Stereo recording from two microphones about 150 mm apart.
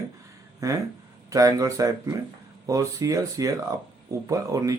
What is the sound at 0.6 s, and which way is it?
A man's voice, 20° right (ahead or behind).